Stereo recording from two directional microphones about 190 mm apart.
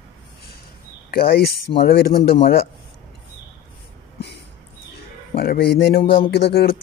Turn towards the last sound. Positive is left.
turn(degrees=60)  # may be behind; listen again after turning